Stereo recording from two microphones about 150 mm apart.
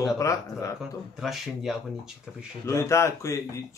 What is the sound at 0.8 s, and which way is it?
Speech, centre (ahead or behind).